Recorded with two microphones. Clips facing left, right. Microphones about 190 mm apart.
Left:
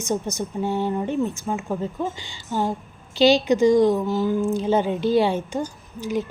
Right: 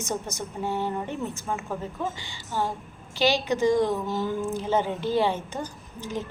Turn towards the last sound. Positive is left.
turn(degrees=10)  # may be behind; listen again after turning